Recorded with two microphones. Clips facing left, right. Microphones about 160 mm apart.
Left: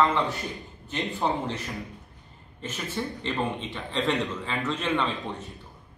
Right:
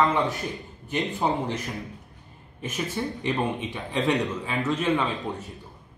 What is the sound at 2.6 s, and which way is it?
A man's voice, 15° right (ahead or behind).